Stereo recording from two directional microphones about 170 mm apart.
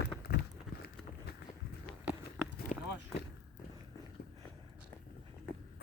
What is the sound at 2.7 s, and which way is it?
Run, 45° left (ahead or behind).